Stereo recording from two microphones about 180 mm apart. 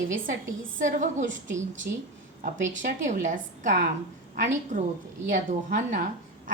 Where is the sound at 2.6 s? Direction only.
45° right (ahead or behind).